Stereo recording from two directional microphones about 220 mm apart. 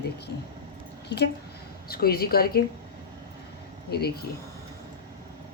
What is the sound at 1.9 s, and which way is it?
Speech, 45° left (ahead or behind).